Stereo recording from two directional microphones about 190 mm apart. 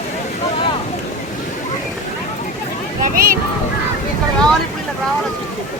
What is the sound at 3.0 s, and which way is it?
Vehicle, 45° right (ahead or behind).